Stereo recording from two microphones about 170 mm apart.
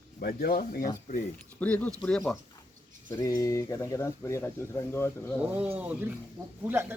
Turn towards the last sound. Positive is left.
turn(degrees=-15)  # may be behind; listen again after turning